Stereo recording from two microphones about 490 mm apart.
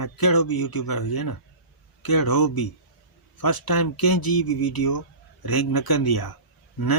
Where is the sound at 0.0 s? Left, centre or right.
Left.